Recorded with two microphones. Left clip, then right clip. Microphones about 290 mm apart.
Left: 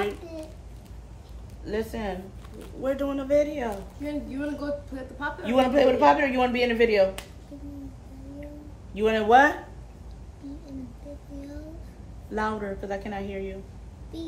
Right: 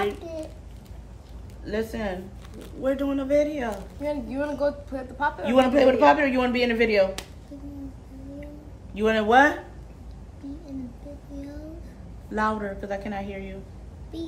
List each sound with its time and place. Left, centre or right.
1.6 s speech: centre
4.0 s a woman's voice: centre
5.5 s speech: centre
8.9 s speech: centre
12.3 s speech: centre